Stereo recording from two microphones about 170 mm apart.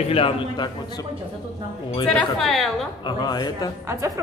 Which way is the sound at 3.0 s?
25° left (ahead or behind).